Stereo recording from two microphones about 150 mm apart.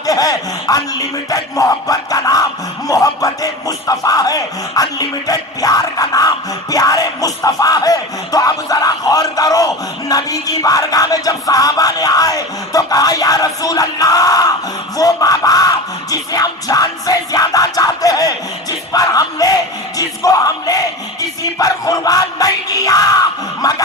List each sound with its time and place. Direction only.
0.0 s speech: 25° left (ahead or behind)
15.0 s music: 25° left (ahead or behind)
18.9 s bellow: 25° left (ahead or behind)